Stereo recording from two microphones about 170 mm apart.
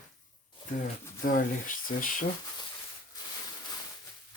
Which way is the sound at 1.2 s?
55° left (ahead or behind).